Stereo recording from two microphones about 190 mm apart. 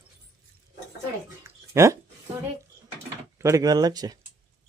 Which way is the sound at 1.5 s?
15° right (ahead or behind).